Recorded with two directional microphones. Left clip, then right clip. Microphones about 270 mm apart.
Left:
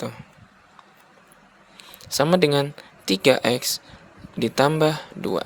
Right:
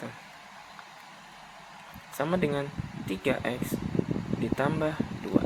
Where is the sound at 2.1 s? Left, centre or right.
Left.